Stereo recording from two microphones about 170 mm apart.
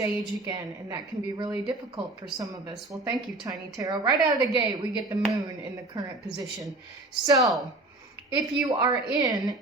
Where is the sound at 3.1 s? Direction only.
20° right (ahead or behind).